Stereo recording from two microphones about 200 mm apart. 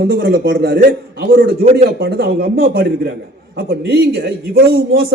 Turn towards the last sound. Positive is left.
turn(degrees=-50)  # may be behind; listen again after turning